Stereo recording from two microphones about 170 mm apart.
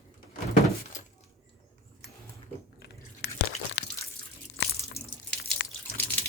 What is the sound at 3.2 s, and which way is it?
Crunch, 80° left.